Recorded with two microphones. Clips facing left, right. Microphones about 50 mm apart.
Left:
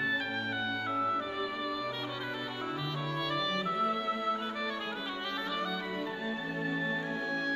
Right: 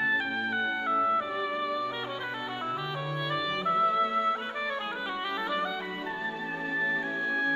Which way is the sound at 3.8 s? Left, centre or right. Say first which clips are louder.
Right 7 dB; right.